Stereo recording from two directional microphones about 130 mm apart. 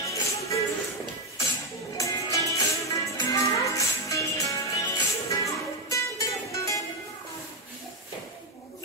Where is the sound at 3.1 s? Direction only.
25° left (ahead or behind).